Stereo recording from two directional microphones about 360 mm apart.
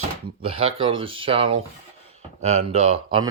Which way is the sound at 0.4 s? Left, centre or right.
Centre.